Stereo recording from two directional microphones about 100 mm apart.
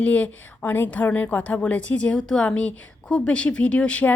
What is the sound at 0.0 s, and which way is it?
A woman's voice, 15° left (ahead or behind).